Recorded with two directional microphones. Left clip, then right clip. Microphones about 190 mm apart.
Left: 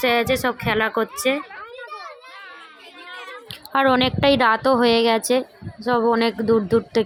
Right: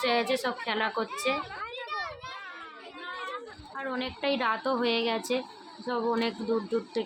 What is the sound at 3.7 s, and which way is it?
Speech, 50° left (ahead or behind).